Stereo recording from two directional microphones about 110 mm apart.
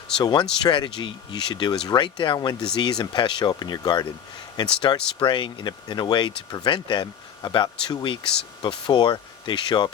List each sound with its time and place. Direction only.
0.2 s speech: 45° left (ahead or behind)